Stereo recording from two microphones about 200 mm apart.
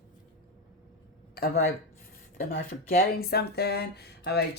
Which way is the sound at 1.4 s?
50° left (ahead or behind).